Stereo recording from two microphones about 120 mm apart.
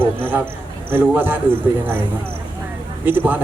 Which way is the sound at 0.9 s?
15° right (ahead or behind).